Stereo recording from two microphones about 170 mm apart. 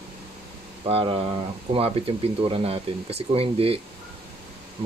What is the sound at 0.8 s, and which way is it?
Speech, 35° right (ahead or behind).